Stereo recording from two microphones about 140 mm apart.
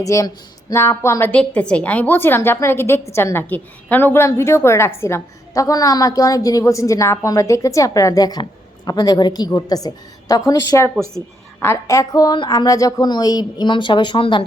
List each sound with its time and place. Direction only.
0.0 s a woman's voice: 25° left (ahead or behind)